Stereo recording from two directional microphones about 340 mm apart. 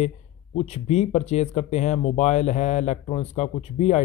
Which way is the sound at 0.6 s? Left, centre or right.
Centre.